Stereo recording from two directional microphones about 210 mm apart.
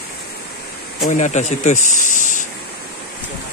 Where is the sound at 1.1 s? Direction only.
35° left (ahead or behind).